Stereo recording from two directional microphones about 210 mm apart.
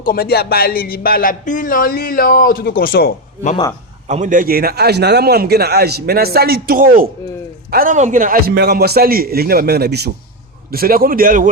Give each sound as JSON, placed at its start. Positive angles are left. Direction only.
{"t": 0.0, "sound": "speech", "side_deg": 45}
{"t": 4.1, "sound": "a man's voice", "side_deg": -35}